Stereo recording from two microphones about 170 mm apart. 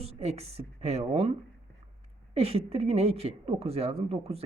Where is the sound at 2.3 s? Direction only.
35° right (ahead or behind).